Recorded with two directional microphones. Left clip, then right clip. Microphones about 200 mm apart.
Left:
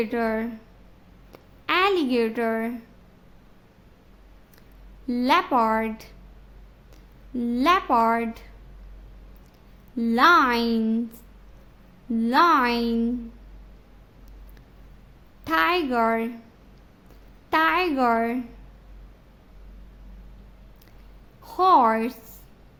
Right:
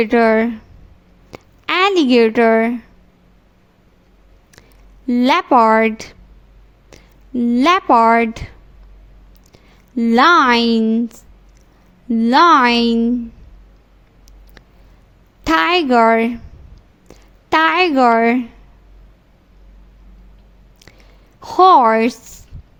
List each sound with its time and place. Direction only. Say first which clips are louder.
0.0 s a woman's voice: right 13 dB; 40° right (ahead or behind)
5.0 s a woman's voice: right 7 dB; 40° right (ahead or behind)
9.9 s a woman's voice: right 6 dB; 40° right (ahead or behind)
12.1 s a woman's voice: right 8 dB; 40° right (ahead or behind)
15.4 s a woman's voice: right 8 dB; 45° right (ahead or behind)
17.5 s a woman's voice: right 8 dB; 40° right (ahead or behind)
21.4 s a woman's voice: right 9 dB; 40° right (ahead or behind)